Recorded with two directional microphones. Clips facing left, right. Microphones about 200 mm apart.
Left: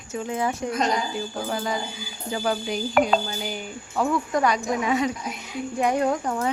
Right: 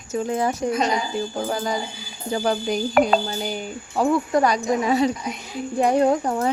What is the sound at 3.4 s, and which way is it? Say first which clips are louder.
Speech: right 4 dB; 35° right (ahead or behind).